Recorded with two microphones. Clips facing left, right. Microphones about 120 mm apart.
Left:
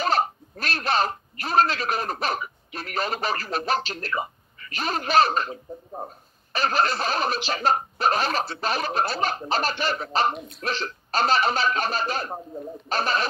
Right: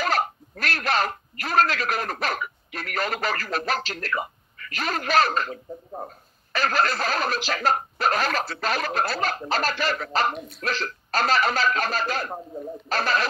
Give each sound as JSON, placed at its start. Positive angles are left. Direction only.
{"t": 0.0, "sound": "speech", "side_deg": 25}
{"t": 10.3, "sound": "speech", "side_deg": 0}
{"t": 10.6, "sound": "speech", "side_deg": 25}